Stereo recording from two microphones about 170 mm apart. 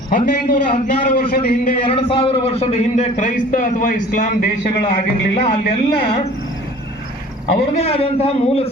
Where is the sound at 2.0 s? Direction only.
30° left (ahead or behind); by 4.4 s 50° left (ahead or behind).